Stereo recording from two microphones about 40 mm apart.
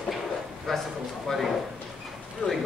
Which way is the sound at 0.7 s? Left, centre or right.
Centre.